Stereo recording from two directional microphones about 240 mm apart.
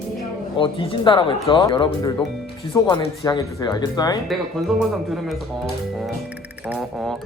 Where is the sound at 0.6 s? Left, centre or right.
Left.